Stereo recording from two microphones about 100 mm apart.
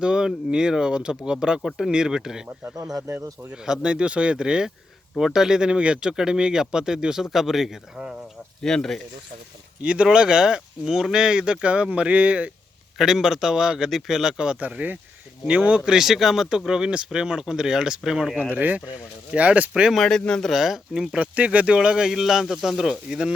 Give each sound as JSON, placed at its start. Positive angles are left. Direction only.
{"t": 0.0, "sound": "speech", "side_deg": -10}
{"t": 2.7, "sound": "speech", "side_deg": -35}
{"t": 3.5, "sound": "speech", "side_deg": -10}
{"t": 8.6, "sound": "speech", "side_deg": 5}
{"t": 9.8, "sound": "speech", "side_deg": -10}
{"t": 18.5, "sound": "speech", "side_deg": -15}
{"t": 19.9, "sound": "speech", "side_deg": 5}